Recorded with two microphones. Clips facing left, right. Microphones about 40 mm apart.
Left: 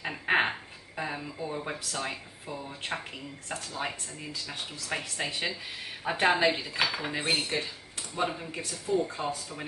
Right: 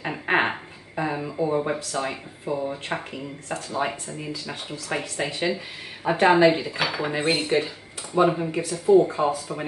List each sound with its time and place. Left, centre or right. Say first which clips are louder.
0.0 s a sound: right 4 dB; centre
2.0 s speech: right 7 dB; centre
8.8 s speech: right 12 dB; right